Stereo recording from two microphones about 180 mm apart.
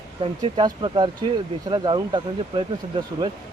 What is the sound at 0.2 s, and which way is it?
Speech, 25° right (ahead or behind).